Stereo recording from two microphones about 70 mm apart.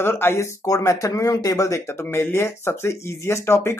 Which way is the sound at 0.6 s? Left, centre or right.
Left.